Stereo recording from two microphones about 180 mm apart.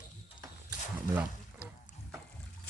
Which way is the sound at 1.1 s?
10° right (ahead or behind).